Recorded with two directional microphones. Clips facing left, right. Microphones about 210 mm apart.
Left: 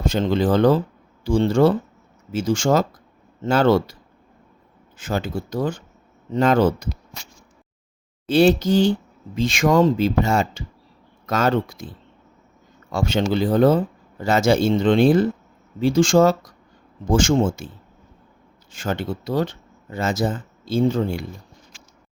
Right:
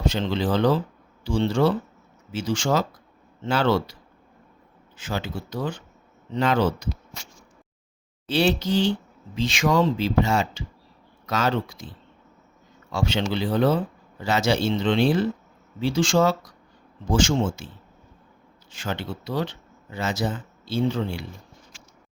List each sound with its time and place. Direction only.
0.0 s speech: 50° left (ahead or behind)
4.9 s speech: 50° left (ahead or behind)
8.3 s speech: 45° left (ahead or behind)
12.9 s speech: 50° left (ahead or behind)
18.7 s speech: 50° left (ahead or behind)